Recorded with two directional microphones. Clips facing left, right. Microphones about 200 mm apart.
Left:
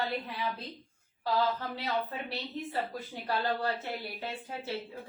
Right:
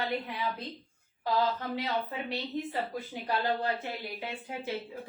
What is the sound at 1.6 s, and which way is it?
Speech, 15° right (ahead or behind).